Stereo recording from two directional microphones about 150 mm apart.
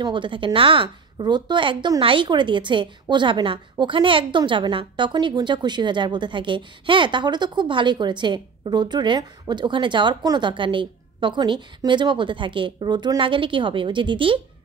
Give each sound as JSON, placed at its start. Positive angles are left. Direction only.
{"t": 0.0, "sound": "a woman's voice", "side_deg": -35}